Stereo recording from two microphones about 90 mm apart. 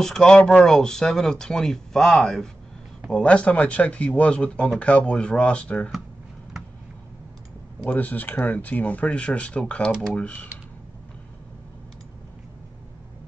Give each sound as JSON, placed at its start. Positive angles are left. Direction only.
{"t": 0.0, "sound": "speech", "side_deg": 5}
{"t": 7.9, "sound": "speech", "side_deg": 20}